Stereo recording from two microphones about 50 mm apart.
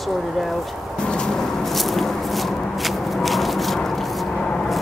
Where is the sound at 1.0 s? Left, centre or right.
Centre.